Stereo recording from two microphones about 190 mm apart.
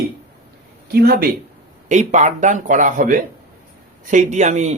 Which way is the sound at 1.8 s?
40° right (ahead or behind).